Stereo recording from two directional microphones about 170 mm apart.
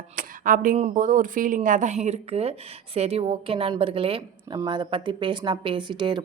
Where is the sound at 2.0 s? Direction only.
40° right (ahead or behind).